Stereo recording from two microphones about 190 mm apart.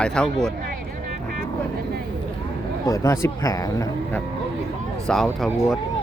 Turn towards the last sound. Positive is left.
turn(degrees=-5)  # may be behind; listen again after turning